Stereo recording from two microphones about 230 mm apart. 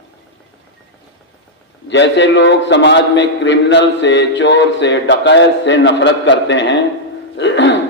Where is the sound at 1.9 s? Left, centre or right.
Left.